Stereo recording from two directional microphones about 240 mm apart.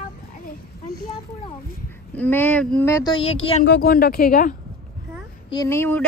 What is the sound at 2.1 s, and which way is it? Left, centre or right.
Speech, centre.